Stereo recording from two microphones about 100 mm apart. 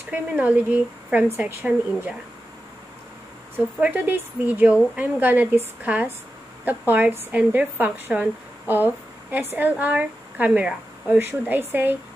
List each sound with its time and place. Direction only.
0.1 s a woman's voice: 15° right (ahead or behind)
3.5 s a woman's voice: 15° right (ahead or behind)